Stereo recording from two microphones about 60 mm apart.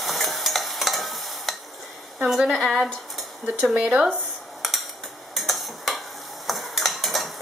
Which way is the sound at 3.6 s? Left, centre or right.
Right.